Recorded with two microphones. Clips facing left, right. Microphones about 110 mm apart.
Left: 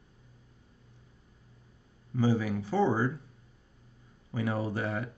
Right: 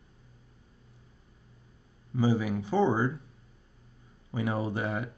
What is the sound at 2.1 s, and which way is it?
Speech, 15° right (ahead or behind).